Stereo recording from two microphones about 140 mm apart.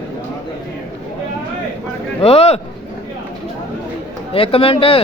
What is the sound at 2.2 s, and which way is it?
Speech, 45° left (ahead or behind).